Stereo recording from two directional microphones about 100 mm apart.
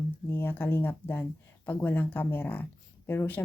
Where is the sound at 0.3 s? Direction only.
20° left (ahead or behind).